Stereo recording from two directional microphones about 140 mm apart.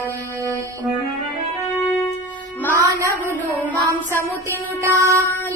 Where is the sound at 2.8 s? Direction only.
20° right (ahead or behind).